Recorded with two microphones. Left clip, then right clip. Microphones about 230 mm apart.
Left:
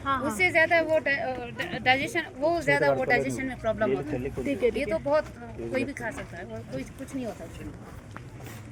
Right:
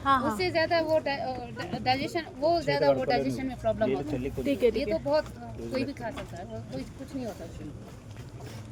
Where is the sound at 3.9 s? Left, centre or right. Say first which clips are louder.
Left 2 dB; left.